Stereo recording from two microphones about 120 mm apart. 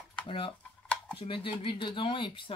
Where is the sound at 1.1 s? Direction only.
45° left (ahead or behind).